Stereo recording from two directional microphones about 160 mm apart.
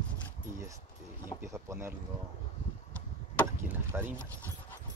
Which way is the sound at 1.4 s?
15° right (ahead or behind).